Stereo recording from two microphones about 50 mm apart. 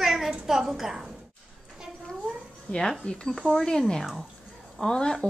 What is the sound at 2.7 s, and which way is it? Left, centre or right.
Speech, left.